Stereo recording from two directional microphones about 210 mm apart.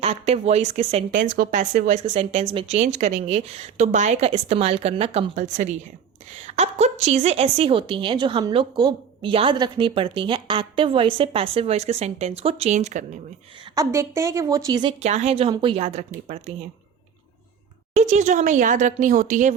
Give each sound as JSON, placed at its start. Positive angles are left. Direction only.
{"t": 0.0, "sound": "a woman's voice", "side_deg": -30}
{"t": 13.7, "sound": "a woman's voice", "side_deg": -15}
{"t": 15.0, "sound": "speech", "side_deg": -30}
{"t": 17.9, "sound": "speech", "side_deg": -35}